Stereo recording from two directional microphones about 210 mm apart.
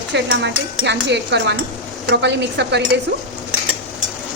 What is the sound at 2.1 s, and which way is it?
Speech, 55° right (ahead or behind).